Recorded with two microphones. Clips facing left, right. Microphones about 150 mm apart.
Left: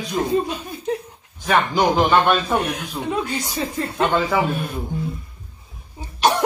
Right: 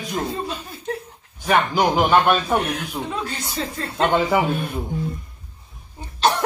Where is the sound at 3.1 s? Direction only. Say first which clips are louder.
Left 4 dB; 15° left (ahead or behind).